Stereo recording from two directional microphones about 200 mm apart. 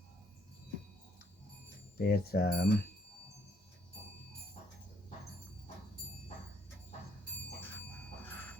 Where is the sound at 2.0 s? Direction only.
50° left (ahead or behind).